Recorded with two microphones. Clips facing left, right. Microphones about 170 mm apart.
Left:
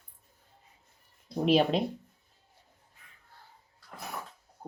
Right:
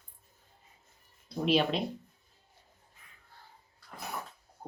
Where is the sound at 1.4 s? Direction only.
45° left (ahead or behind).